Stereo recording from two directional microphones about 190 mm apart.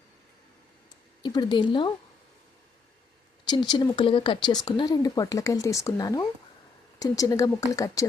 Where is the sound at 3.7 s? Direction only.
25° left (ahead or behind).